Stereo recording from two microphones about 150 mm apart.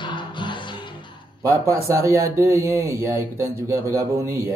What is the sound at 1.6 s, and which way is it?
Speech, 20° right (ahead or behind).